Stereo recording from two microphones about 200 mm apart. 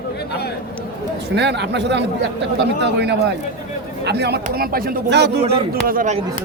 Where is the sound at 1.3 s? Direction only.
60° right (ahead or behind).